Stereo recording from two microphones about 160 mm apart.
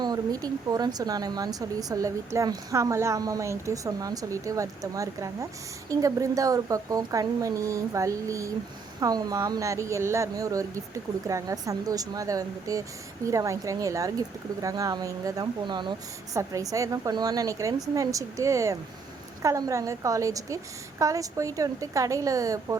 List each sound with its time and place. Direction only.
0.0 s speech: 25° right (ahead or behind)